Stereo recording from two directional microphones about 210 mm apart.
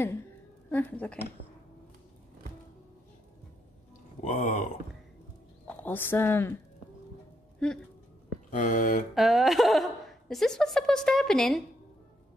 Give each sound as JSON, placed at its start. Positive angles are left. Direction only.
{"t": 0.7, "sound": "speech", "side_deg": 10}
{"t": 4.2, "sound": "a sound", "side_deg": 40}
{"t": 5.7, "sound": "speech", "side_deg": 10}
{"t": 7.6, "sound": "a woman's voice", "side_deg": 5}
{"t": 8.5, "sound": "a sound", "side_deg": 40}
{"t": 9.1, "sound": "a woman's voice", "side_deg": 0}